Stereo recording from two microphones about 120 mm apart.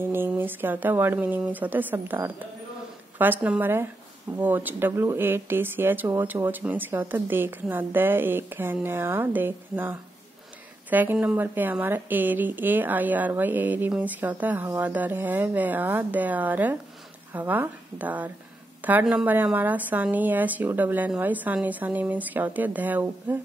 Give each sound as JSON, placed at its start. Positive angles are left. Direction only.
{"t": 0.0, "sound": "a woman's voice", "side_deg": -20}